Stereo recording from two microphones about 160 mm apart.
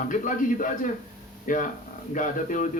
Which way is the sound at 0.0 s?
55° left (ahead or behind).